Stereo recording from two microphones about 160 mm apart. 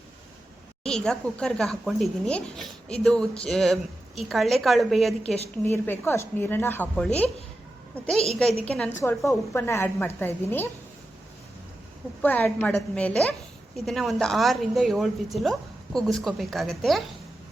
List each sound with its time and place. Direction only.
0.9 s a woman's voice: 5° left (ahead or behind)
5.6 s a woman's voice: 15° left (ahead or behind)
8.6 s a woman's voice: 5° left (ahead or behind)
9.0 s a woman's voice: 20° left (ahead or behind)
12.2 s a woman's voice: 10° left (ahead or behind)